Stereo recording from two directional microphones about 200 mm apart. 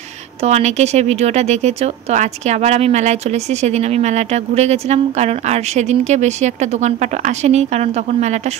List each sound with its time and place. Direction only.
0.4 s speech: 35° right (ahead or behind)